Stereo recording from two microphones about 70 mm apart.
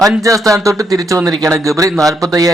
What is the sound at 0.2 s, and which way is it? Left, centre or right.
Speech, right.